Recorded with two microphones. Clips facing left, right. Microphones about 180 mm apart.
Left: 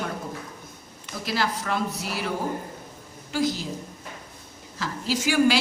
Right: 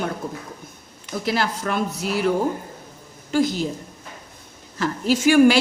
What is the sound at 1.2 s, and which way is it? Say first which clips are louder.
A woman's voice: right 3 dB; 60° right (ahead or behind).